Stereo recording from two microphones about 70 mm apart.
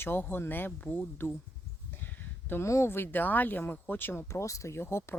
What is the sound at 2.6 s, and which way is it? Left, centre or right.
Speech, left.